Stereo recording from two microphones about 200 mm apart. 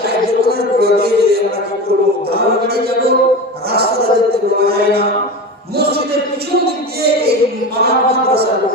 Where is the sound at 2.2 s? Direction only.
50° right (ahead or behind).